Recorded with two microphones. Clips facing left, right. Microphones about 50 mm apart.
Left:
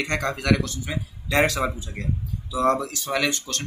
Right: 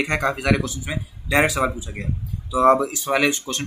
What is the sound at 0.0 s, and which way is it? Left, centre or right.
Speech, centre.